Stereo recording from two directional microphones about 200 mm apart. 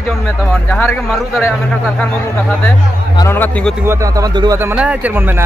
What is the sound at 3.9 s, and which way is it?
Speech, 15° right (ahead or behind).